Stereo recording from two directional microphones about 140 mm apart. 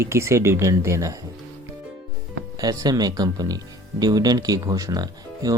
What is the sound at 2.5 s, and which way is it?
Speech, 25° right (ahead or behind).